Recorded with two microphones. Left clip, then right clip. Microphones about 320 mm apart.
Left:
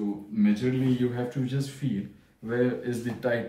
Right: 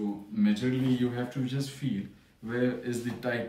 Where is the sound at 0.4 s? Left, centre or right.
Centre.